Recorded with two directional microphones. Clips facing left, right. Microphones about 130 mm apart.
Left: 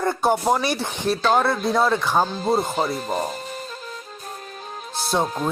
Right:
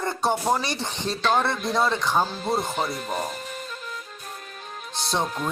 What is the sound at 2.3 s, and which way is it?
Speech, 35° left (ahead or behind).